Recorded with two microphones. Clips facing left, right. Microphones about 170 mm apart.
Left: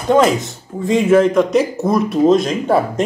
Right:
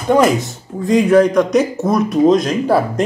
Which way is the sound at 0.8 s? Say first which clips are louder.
Right 1 dB; centre (ahead or behind).